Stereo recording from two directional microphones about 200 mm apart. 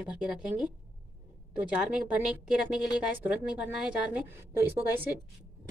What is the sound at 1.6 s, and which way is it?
Speech, 5° right (ahead or behind).